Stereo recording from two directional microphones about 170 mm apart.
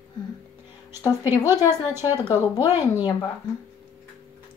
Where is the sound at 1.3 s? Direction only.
20° left (ahead or behind).